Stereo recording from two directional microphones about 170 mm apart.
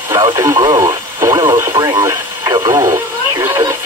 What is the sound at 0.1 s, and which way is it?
Radio, 25° right (ahead or behind).